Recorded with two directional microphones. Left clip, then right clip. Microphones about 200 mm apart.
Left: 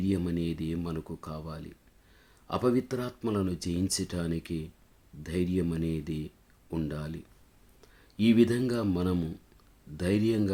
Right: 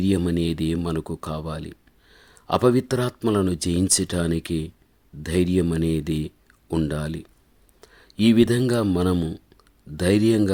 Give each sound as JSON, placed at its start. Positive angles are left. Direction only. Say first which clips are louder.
{"t": 0.0, "sound": "speech", "louder": "right 8 dB", "side_deg": -45}